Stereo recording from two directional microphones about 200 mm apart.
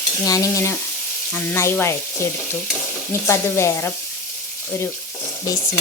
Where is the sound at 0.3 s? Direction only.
15° left (ahead or behind).